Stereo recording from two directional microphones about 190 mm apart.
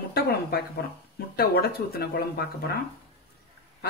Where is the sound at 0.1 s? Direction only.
55° left (ahead or behind).